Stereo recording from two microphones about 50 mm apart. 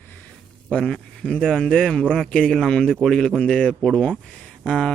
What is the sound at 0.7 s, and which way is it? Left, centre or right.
A man's voice, centre.